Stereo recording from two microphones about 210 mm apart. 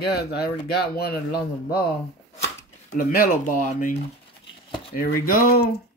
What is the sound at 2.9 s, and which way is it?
Speech, 40° left (ahead or behind).